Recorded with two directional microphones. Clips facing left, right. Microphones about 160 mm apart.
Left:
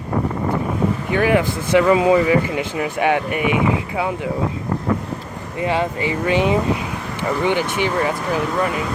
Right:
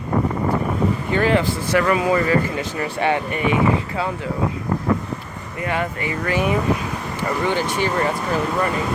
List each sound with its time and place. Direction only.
1.2 s speech: 15° left (ahead or behind)
5.5 s speech: 25° left (ahead or behind)
7.9 s speech: 5° left (ahead or behind)